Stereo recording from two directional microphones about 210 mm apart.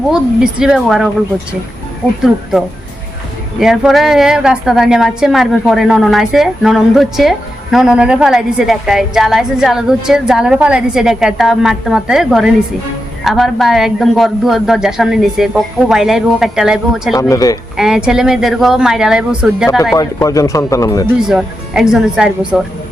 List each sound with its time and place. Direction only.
0.1 s a woman's voice: 5° right (ahead or behind)
2.2 s a woman's voice: centre (ahead or behind)
17.2 s speech: 15° left (ahead or behind)
17.7 s a woman's voice: 5° right (ahead or behind)
19.8 s speech: 15° left (ahead or behind)
21.2 s a woman's voice: centre (ahead or behind)